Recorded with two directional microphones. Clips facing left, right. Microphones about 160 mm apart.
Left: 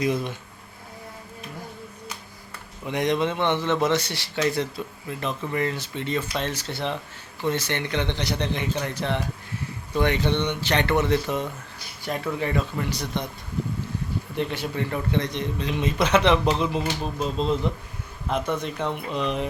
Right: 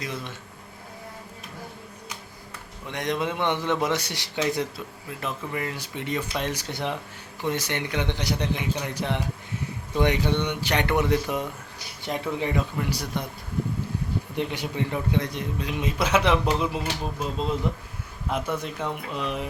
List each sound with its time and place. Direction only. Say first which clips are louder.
0.0 s speech: left 9 dB; 15° left (ahead or behind)
2.8 s a man's voice: left 4 dB; 5° left (ahead or behind); by 4.6 s 15° right (ahead or behind)
5.2 s a man's voice: left 4 dB; 5° right (ahead or behind)
14.3 s a man's voice: left 2 dB; 15° right (ahead or behind)